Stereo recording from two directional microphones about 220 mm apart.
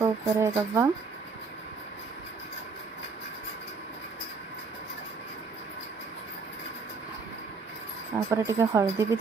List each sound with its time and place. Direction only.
0.0 s speech: 15° right (ahead or behind)
8.3 s speech: 10° right (ahead or behind)